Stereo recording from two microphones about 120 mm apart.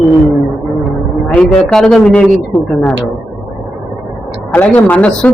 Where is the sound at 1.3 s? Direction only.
5° left (ahead or behind).